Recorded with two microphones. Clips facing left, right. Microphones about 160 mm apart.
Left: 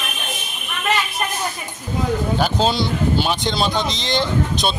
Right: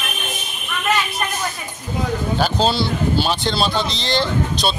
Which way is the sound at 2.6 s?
20° left (ahead or behind).